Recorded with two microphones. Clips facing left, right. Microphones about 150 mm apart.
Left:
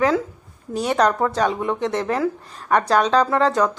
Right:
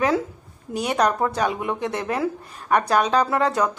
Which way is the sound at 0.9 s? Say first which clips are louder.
Left 2 dB; 15° right (ahead or behind).